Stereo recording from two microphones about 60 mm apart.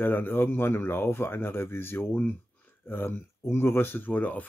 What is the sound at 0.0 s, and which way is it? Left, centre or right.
Speech, left.